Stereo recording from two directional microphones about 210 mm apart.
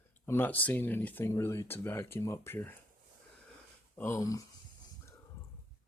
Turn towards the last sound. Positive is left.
turn(degrees=15)  # may be behind; listen again after turning